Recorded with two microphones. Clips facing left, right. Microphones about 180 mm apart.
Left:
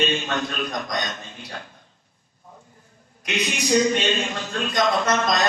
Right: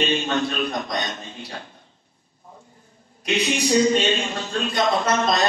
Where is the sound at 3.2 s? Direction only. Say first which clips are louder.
Right 4 dB; 30° right (ahead or behind).